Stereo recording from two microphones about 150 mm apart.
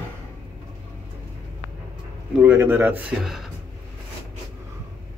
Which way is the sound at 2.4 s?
15° right (ahead or behind).